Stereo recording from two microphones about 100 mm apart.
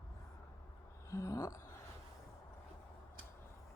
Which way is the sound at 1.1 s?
35° left (ahead or behind).